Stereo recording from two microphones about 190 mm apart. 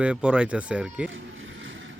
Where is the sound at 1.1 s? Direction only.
90° right.